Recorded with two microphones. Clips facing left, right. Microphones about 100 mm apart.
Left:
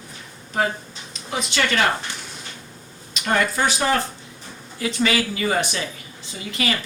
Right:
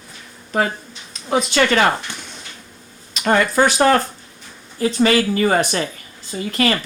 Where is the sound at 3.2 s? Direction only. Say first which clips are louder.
Right 5 dB; 55° right (ahead or behind).